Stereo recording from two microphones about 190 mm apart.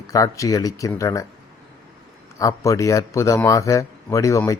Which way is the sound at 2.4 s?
15° left (ahead or behind).